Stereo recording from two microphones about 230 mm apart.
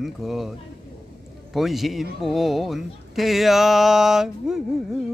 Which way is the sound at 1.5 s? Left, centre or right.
Centre.